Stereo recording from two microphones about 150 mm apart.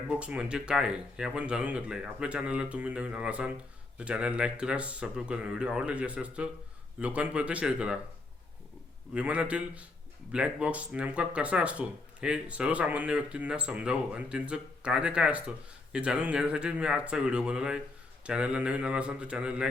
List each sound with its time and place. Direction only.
0.1 s speech: 5° right (ahead or behind)
9.1 s speech: 10° right (ahead or behind)